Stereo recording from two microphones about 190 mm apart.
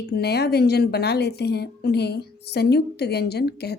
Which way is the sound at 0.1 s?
60° left (ahead or behind).